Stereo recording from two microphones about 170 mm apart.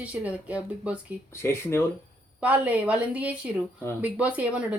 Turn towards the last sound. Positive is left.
turn(degrees=-10)  # may be behind; listen again after turning